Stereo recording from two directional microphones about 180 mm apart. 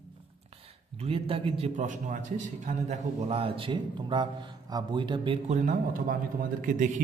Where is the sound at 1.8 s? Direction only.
45° right (ahead or behind); by 5.4 s 25° right (ahead or behind).